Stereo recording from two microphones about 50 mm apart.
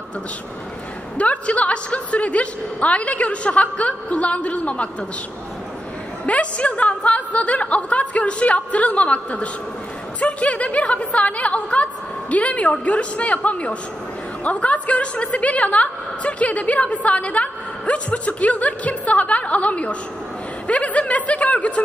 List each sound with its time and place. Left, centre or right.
1.1 s a woman's voice: left
6.2 s a woman's voice: left